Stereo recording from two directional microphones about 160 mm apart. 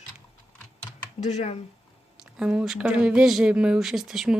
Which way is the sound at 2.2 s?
5° right (ahead or behind).